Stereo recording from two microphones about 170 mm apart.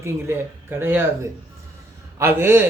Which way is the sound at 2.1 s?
15° right (ahead or behind).